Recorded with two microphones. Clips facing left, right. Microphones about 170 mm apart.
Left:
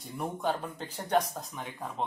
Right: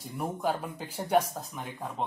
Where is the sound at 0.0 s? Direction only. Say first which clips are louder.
Right 1 dB; 5° right (ahead or behind).